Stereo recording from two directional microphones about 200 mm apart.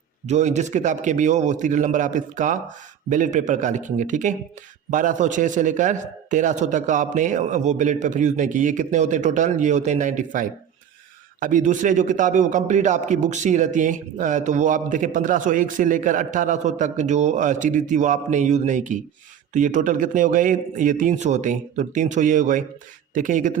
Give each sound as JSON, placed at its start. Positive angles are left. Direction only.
{"t": 0.3, "sound": "a man's voice", "side_deg": -35}